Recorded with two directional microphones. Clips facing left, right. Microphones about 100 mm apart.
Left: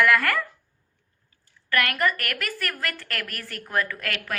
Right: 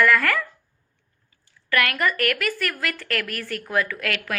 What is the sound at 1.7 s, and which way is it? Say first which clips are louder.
A woman's voice: right 1 dB; centre (ahead or behind).